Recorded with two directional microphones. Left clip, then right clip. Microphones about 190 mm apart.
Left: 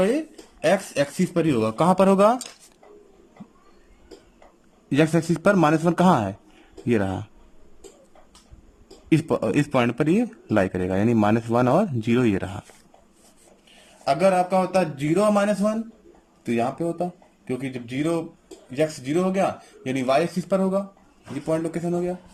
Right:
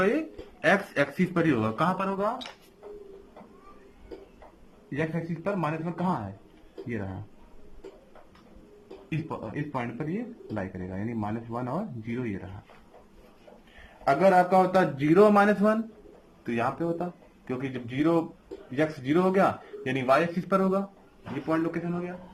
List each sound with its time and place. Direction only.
0.6 s speech: 15° left (ahead or behind)
2.0 s a man's voice: 60° left (ahead or behind)
4.9 s speech: 70° left (ahead or behind)
9.0 s a man's voice: 55° left (ahead or behind); by 12.3 s 75° left (ahead or behind)
14.0 s speech: 5° left (ahead or behind)
15.1 s a man's voice: 15° left (ahead or behind)
16.5 s speech: 25° left (ahead or behind); by 19.5 s 5° left (ahead or behind)
19.8 s a man's voice: 15° left (ahead or behind)